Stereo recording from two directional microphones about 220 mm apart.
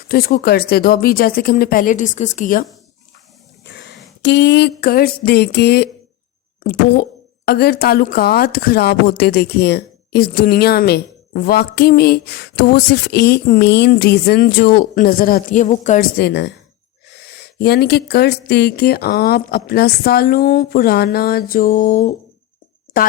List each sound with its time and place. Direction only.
0.1 s speech: 45° left (ahead or behind)
3.6 s a sound: 50° left (ahead or behind)
4.2 s speech: 50° left (ahead or behind); by 16.0 s 35° left (ahead or behind)
16.1 s speech: 50° left (ahead or behind)